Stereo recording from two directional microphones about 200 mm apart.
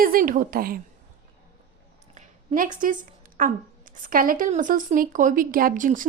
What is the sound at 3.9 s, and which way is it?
A woman's voice, 40° right (ahead or behind).